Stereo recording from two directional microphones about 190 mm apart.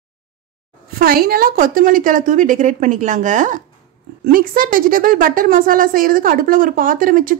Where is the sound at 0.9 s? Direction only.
50° right (ahead or behind).